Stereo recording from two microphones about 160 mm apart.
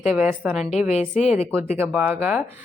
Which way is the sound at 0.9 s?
45° left (ahead or behind).